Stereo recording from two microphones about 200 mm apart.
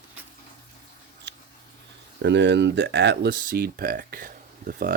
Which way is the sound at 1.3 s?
55° right (ahead or behind).